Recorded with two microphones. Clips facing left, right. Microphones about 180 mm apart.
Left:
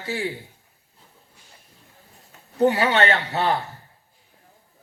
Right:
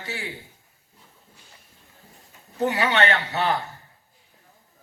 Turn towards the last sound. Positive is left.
turn(degrees=35)  # may be behind; listen again after turning